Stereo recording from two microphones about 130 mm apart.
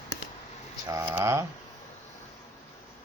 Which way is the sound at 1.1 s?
20° right (ahead or behind).